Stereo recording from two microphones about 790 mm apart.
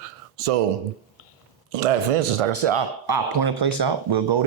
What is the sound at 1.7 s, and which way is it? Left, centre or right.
A man's voice, right.